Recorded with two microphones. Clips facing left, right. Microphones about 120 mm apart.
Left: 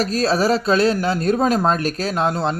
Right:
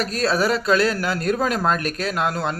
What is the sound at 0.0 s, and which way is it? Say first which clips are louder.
Speech: left 3 dB; 25° left (ahead or behind).